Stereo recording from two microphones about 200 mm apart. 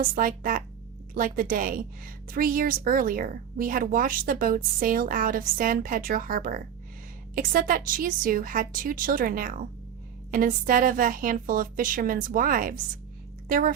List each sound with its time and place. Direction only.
0.0 s a woman's voice: 45° right (ahead or behind)